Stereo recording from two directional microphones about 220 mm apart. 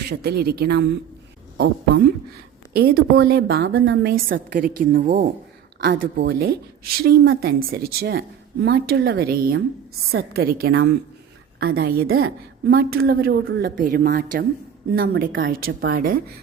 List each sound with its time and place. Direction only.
0.1 s a woman's voice: 45° right (ahead or behind)